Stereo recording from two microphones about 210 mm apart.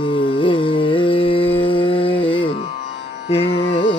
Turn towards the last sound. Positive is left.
turn(degrees=25)  # may be behind; listen again after turning